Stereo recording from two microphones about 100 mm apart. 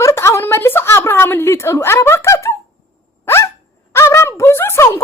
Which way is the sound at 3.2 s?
25° left (ahead or behind).